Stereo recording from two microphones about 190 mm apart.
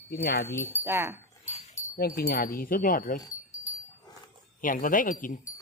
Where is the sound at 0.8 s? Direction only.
15° right (ahead or behind).